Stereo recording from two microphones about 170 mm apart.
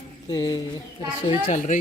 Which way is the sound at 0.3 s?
25° left (ahead or behind).